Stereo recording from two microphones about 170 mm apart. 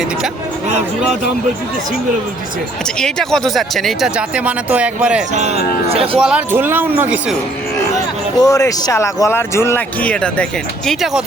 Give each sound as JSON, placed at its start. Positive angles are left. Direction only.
{"t": 3.0, "sound": "speech", "side_deg": 5}
{"t": 5.3, "sound": "speech", "side_deg": -40}
{"t": 6.1, "sound": "speech", "side_deg": -5}
{"t": 8.4, "sound": "speech", "side_deg": 20}